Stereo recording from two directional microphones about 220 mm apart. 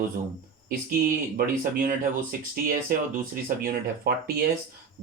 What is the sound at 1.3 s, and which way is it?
Speech, 40° right (ahead or behind).